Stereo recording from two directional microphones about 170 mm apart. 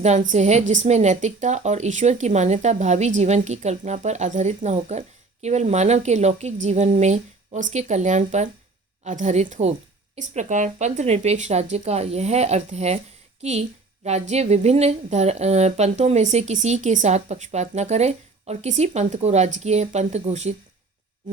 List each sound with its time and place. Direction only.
0.0 s a woman's voice: 45° right (ahead or behind)